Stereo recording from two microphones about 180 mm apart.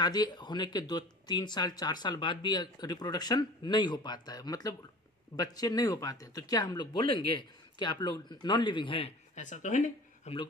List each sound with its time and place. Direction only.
0.0 s speech: 20° left (ahead or behind); by 10.3 s 45° left (ahead or behind)